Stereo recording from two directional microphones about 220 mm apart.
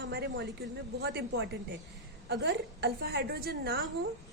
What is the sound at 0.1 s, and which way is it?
A woman's voice, 50° right (ahead or behind).